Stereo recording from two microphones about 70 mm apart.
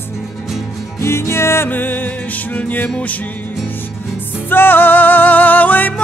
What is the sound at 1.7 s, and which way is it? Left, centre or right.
Music, left.